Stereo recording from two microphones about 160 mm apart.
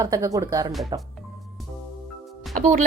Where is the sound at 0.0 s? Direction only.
20° right (ahead or behind).